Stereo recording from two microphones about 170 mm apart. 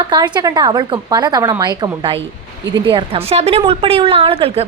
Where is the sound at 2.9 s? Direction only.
35° right (ahead or behind).